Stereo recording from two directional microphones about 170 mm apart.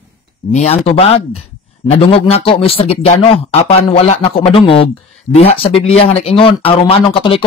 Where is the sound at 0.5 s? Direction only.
40° left (ahead or behind).